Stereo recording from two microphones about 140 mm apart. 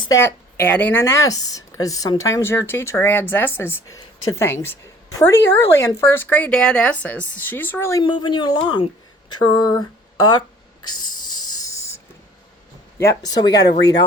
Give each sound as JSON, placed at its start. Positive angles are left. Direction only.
{"t": 0.1, "sound": "speech", "side_deg": 15}
{"t": 8.0, "sound": "speech", "side_deg": 35}
{"t": 9.3, "sound": "a sound", "side_deg": 30}
{"t": 10.8, "sound": "snort", "side_deg": 30}
{"t": 13.0, "sound": "speech", "side_deg": 25}